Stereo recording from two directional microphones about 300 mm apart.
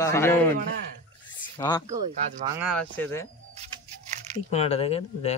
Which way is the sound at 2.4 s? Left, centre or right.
Centre.